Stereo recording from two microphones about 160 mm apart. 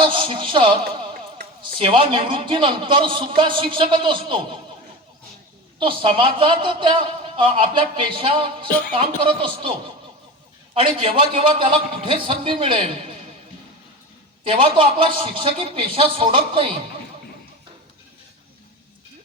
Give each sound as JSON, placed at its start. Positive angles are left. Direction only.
{"t": 0.0, "sound": "a woman's voice", "side_deg": -35}
{"t": 1.7, "sound": "a man's voice", "side_deg": -35}
{"t": 5.8, "sound": "a man's voice", "side_deg": -30}
{"t": 10.8, "sound": "a man's voice", "side_deg": -35}
{"t": 14.4, "sound": "a man's voice", "side_deg": -35}